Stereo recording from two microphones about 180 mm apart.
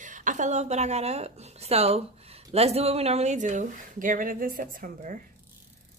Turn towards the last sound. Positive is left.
turn(degrees=-50)  # may be behind; listen again after turning